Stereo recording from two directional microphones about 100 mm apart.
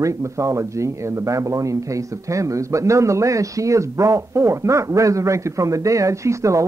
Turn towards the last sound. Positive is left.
turn(degrees=-30)  # may be behind; listen again after turning